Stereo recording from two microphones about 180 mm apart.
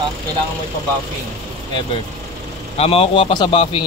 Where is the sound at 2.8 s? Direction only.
30° left (ahead or behind).